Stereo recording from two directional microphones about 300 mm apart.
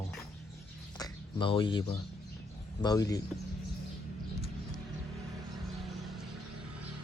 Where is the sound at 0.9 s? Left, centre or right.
Centre.